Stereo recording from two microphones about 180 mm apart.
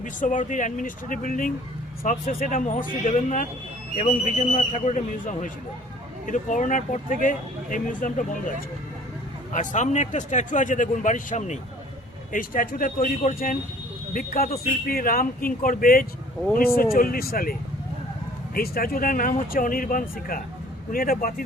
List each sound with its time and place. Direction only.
0.0 s speech: 45° left (ahead or behind)